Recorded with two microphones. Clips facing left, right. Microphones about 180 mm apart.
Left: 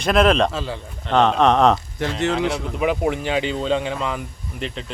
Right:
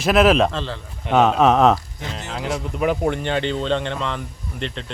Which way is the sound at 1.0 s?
5° right (ahead or behind).